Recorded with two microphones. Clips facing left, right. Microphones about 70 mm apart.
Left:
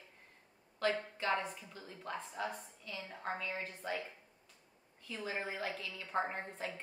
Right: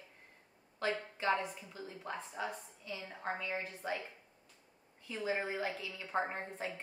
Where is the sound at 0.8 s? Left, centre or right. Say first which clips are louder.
Even; centre.